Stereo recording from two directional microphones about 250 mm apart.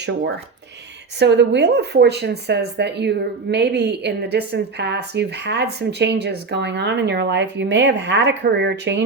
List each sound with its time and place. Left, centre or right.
1.2 s speech: right